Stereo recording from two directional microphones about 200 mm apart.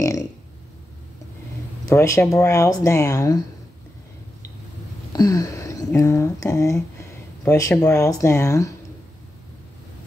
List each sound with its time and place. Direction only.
1.9 s speech: 15° left (ahead or behind)
5.1 s a sound: 20° left (ahead or behind)
5.9 s speech: 15° left (ahead or behind)